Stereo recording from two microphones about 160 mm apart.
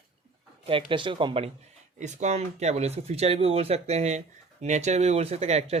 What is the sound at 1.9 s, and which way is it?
Speech, 50° right (ahead or behind).